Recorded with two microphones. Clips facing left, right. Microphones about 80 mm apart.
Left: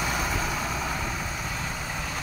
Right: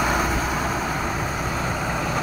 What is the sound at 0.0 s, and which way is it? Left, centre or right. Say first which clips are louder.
Vehicle: right 7 dB; right.